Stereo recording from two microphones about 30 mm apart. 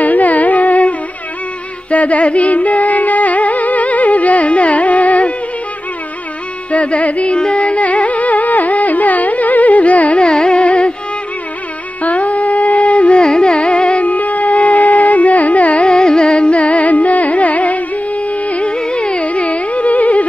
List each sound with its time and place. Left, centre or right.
0.0 s carnatic music: left
1.9 s music: left
4.5 s carnatic music: left
6.7 s music: left
7.3 s carnatic music: left
10.1 s carnatic music: left
10.6 s music: left
12.0 s carnatic music: left
13.2 s carnatic music: left
14.0 s carnatic music: left
15.9 s carnatic music: left
18.7 s music: left
19.2 s carnatic music: left